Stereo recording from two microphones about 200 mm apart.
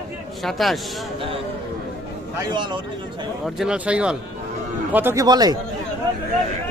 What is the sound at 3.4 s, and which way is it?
Speech, 5° right (ahead or behind).